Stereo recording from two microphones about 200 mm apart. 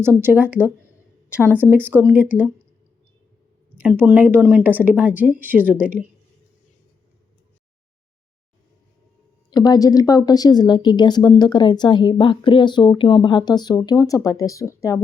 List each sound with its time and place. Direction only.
0.0 s speech: 10° right (ahead or behind)
3.8 s speech: 5° right (ahead or behind)
9.5 s speech: 20° left (ahead or behind)